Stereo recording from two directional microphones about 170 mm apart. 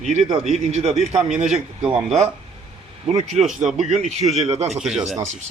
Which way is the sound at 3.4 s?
45° right (ahead or behind).